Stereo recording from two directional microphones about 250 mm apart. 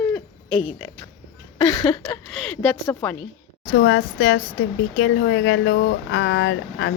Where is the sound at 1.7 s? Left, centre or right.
Centre.